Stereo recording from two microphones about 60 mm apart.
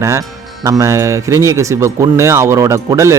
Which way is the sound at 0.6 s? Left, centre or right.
Right.